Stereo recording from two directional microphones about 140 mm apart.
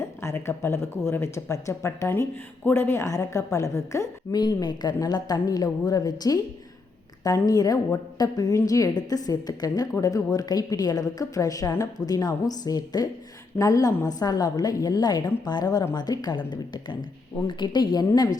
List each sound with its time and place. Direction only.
0.0 s a woman's voice: 20° left (ahead or behind)